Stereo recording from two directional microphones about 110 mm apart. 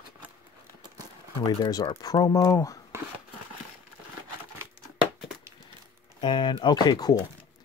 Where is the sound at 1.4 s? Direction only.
40° left (ahead or behind).